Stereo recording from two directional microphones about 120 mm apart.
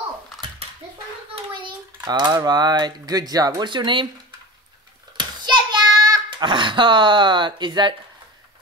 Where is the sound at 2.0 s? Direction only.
35° right (ahead or behind).